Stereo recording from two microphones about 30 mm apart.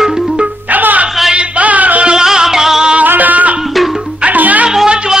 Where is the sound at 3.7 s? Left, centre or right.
Centre.